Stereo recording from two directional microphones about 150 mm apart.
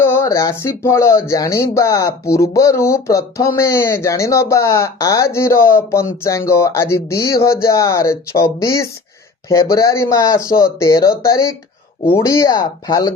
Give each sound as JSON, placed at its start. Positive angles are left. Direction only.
{"t": 0.0, "sound": "speech", "side_deg": 20}